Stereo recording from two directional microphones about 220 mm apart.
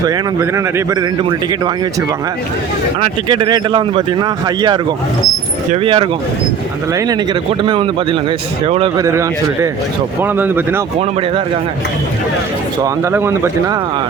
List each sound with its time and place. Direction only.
0.0 s speech: 15° right (ahead or behind)
7.6 s speech: 20° right (ahead or behind)
11.0 s speech: 25° right (ahead or behind)
12.8 s speech: 10° right (ahead or behind)